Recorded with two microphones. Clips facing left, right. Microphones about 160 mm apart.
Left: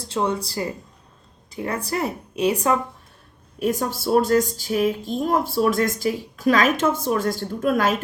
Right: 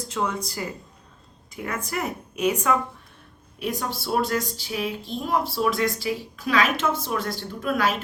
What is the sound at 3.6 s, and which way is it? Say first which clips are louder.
Speech: left 6 dB; 45° left (ahead or behind).